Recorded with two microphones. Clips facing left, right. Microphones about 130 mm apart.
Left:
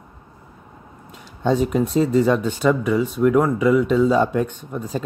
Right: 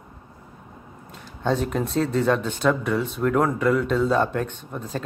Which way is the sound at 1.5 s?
5° left (ahead or behind).